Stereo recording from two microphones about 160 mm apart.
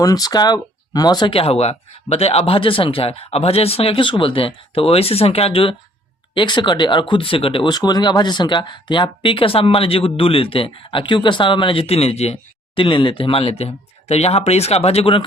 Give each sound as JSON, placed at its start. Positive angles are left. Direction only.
{"t": 0.0, "sound": "speech", "side_deg": 25}